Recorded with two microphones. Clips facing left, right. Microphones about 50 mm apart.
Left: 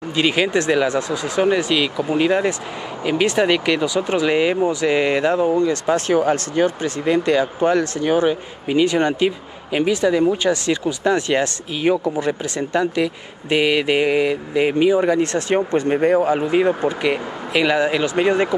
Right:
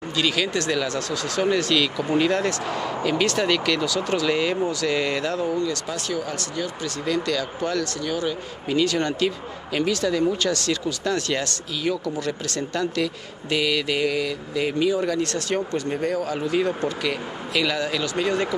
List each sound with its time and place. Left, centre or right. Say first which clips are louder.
0.1 s speech: left 6 dB; left